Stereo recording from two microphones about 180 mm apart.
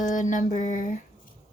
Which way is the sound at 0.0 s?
45° left (ahead or behind).